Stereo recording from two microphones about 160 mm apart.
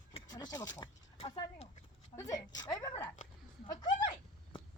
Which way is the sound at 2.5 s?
25° left (ahead or behind).